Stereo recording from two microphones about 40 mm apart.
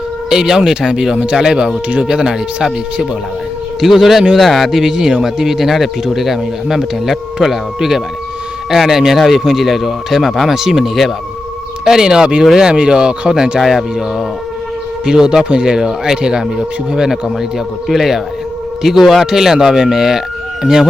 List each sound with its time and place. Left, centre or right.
0.3 s speech: centre
11.9 s speech: centre
13.6 s speech: centre
15.0 s speech: centre
17.8 s speech: centre